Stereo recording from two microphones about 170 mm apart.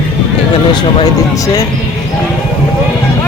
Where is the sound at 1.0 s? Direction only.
20° left (ahead or behind).